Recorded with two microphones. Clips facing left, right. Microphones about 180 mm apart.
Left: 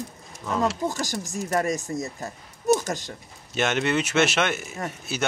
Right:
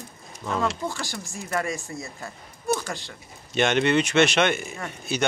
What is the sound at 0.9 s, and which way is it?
Speech, 40° left (ahead or behind).